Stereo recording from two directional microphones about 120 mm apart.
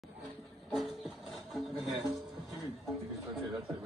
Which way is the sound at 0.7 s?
Centre (ahead or behind).